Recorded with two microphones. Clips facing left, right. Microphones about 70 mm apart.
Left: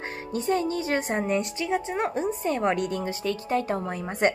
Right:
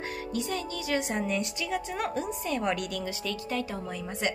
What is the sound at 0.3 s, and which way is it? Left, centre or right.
A woman's voice, left.